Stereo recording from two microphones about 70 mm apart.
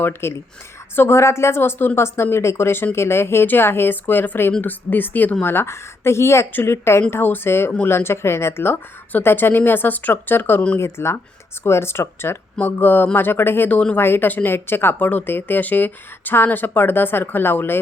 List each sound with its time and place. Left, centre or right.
0.0 s speech: left